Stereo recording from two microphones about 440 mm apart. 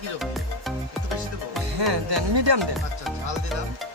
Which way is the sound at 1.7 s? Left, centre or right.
Right.